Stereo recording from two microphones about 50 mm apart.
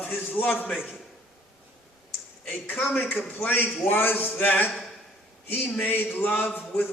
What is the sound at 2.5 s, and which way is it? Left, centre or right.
A man's voice, left.